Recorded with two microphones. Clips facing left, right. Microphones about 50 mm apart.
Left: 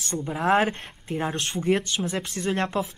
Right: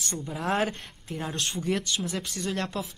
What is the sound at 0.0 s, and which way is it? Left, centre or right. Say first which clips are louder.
Speech: left 6 dB; left.